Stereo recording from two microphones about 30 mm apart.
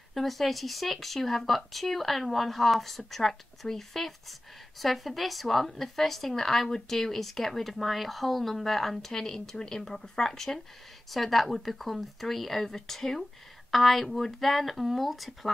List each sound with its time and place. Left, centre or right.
0.1 s speech: centre
8.9 s speech: centre
11.1 s speech: centre